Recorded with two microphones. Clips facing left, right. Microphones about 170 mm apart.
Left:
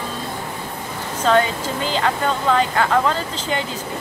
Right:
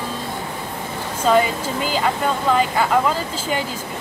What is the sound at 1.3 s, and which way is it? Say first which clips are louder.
Speech: even; 5° right (ahead or behind).